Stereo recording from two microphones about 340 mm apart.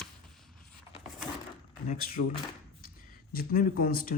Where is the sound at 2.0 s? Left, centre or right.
Left.